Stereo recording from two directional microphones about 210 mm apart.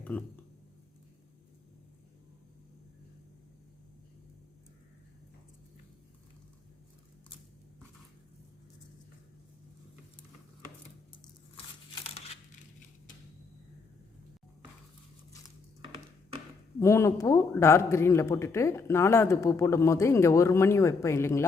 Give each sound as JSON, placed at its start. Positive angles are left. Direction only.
{"t": 0.0, "sound": "speech", "side_deg": 5}
{"t": 12.0, "sound": "tearing", "side_deg": 30}
{"t": 16.8, "sound": "speech", "side_deg": 15}